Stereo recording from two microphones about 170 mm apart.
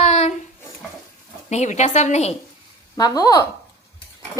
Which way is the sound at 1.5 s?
45° left (ahead or behind).